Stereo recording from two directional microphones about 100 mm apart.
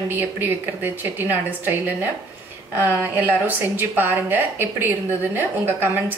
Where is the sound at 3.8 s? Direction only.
20° right (ahead or behind).